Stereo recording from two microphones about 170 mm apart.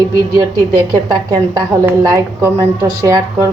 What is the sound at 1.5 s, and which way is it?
A woman's voice, 20° right (ahead or behind).